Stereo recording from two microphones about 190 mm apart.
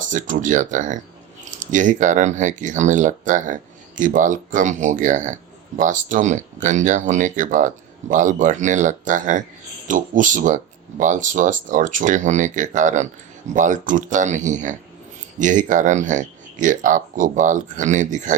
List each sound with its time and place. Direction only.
0.1 s speech: 40° right (ahead or behind)